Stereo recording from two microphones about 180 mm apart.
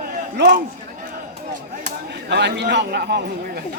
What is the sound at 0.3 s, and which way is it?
Speech, 70° right (ahead or behind).